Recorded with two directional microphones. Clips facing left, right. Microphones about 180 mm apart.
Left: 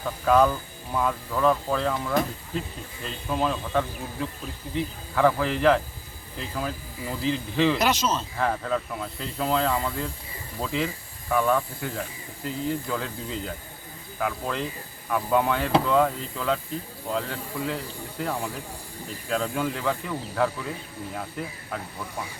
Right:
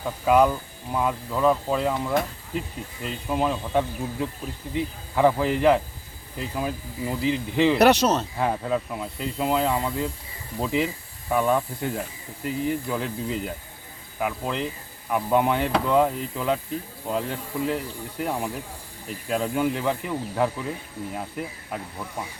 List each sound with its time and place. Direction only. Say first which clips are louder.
0.0 s speech: right 1 dB; 15° right (ahead or behind)
7.8 s speech: right 7 dB; 65° right (ahead or behind)
8.4 s speech: right 1 dB; 15° right (ahead or behind)